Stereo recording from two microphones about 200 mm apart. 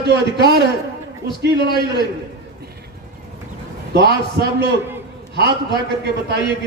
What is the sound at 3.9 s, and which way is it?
Speech, 55° right (ahead or behind).